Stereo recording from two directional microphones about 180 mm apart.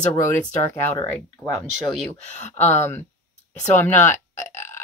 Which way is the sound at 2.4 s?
40° left (ahead or behind).